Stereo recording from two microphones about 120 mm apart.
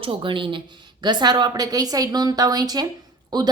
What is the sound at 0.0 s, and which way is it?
Speech, 45° right (ahead or behind).